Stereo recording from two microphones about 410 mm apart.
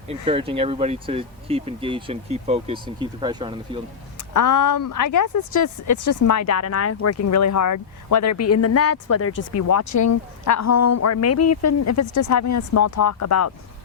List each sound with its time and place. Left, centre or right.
0.1 s speech: centre
4.4 s a woman's voice: left